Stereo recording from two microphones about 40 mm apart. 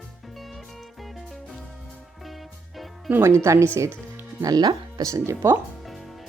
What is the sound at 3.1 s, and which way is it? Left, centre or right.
Speech, right.